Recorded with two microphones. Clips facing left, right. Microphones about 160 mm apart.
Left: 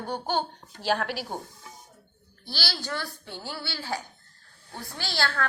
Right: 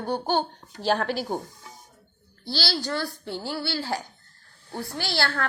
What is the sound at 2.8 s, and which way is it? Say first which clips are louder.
Speech: right 5 dB; 15° right (ahead or behind).